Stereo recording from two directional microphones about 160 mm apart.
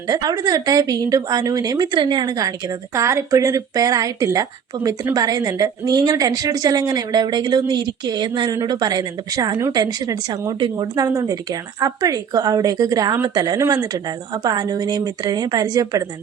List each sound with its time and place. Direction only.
0.1 s a woman's voice: 25° right (ahead or behind)